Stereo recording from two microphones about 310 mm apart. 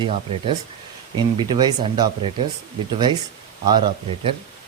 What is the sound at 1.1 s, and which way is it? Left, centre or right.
Speech, centre.